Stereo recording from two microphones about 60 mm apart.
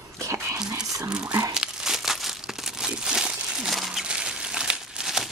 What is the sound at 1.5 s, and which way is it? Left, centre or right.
Crumpling, centre.